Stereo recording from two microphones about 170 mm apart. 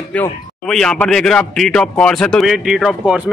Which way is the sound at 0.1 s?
5° left (ahead or behind).